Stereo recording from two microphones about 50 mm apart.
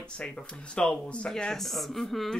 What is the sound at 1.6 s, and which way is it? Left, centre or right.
Speech, centre.